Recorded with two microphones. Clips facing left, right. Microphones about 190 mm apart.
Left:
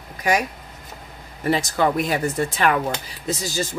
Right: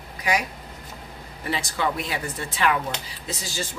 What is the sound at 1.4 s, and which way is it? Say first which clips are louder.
Speech: left 7 dB; 45° left (ahead or behind).